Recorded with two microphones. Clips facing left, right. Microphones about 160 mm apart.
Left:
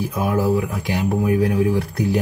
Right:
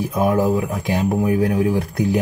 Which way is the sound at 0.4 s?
20° right (ahead or behind).